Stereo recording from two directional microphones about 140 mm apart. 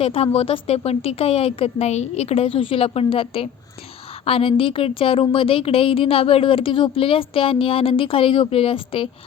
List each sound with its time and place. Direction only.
0.0 s a woman's voice: 45° left (ahead or behind)